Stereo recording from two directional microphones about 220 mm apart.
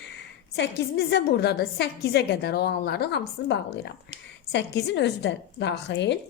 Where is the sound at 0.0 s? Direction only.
50° left (ahead or behind).